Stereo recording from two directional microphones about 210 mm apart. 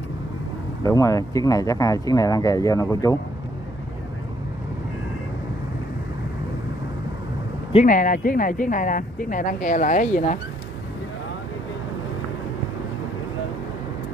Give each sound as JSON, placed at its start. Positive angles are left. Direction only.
{"t": 0.8, "sound": "speech", "side_deg": 15}
{"t": 7.7, "sound": "speech", "side_deg": 40}